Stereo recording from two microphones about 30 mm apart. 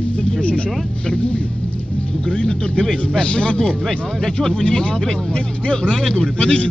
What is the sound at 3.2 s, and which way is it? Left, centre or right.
Speech, left.